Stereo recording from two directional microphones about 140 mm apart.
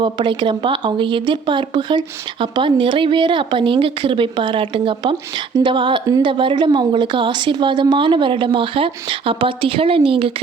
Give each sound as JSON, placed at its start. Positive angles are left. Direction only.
{"t": 0.0, "sound": "speech", "side_deg": -35}